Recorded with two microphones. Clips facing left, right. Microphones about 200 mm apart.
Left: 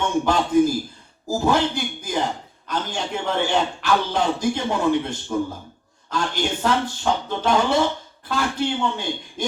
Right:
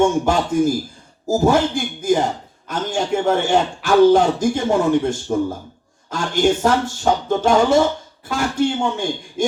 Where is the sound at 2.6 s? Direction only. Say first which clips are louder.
Right 5 dB; 50° right (ahead or behind).